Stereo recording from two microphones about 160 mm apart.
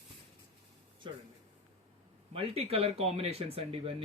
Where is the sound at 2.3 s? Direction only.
40° right (ahead or behind).